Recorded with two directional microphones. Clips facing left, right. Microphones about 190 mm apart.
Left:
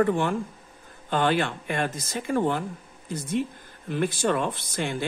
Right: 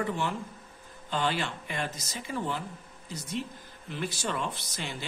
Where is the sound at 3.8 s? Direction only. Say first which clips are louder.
Left 9 dB; 55° left (ahead or behind).